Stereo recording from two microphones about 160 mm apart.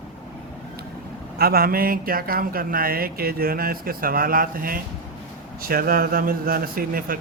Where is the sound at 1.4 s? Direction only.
70° right (ahead or behind).